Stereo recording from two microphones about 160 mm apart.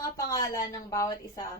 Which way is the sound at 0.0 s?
20° left (ahead or behind).